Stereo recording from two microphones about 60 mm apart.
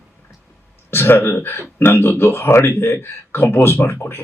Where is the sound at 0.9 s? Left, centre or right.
Left.